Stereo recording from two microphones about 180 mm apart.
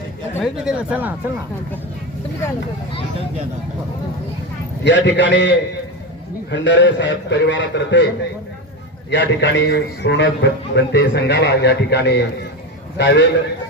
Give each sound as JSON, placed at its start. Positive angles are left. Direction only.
{"t": 0.4, "sound": "speech", "side_deg": -5}
{"t": 4.8, "sound": "a man's voice", "side_deg": 75}
{"t": 6.5, "sound": "a man's voice", "side_deg": 85}